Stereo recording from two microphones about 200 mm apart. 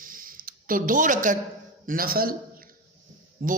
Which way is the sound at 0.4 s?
45° right (ahead or behind).